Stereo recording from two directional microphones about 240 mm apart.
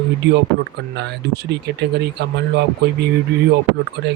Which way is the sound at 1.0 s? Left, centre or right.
Right.